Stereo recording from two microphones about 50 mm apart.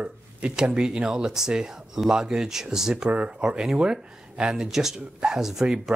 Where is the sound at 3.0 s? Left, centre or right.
Right.